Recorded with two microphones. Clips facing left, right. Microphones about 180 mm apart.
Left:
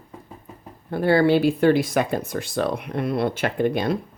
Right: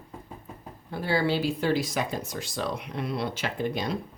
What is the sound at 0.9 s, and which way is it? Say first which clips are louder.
Speech: left 9 dB; 55° left (ahead or behind).